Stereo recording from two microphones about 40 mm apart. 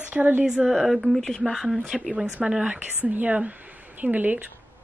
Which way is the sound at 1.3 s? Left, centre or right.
Centre.